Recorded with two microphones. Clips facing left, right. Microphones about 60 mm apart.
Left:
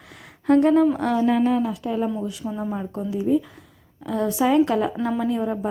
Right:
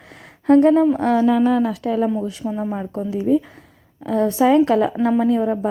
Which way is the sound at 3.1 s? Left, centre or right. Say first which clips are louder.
Right 3 dB; right.